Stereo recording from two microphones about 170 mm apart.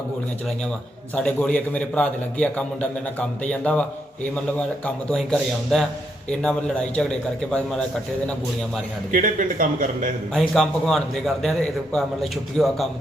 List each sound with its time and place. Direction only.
1.1 s a man's voice: 5° left (ahead or behind)
5.1 s a man's voice: centre (ahead or behind)
9.1 s speech: 50° right (ahead or behind)
10.3 s a man's voice: 5° left (ahead or behind)